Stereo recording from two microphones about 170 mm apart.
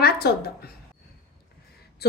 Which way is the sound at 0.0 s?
65° left (ahead or behind).